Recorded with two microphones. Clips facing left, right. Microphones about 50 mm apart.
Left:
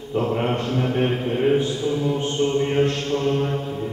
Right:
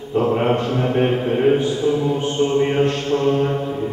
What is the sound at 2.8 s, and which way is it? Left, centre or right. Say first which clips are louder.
Mantra: right 3 dB; centre.